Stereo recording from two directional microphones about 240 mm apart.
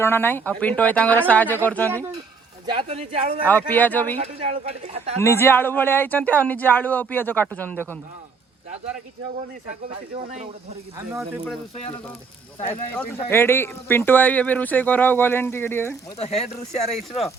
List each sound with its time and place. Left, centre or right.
0.0 s speech: centre
2.7 s speech: right
3.4 s speech: centre
4.2 s speech: right
5.2 s speech: centre
10.9 s speech: centre
13.2 s speech: centre
16.1 s speech: left
16.9 s speech: centre